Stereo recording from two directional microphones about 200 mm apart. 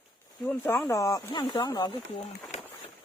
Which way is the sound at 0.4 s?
5° left (ahead or behind).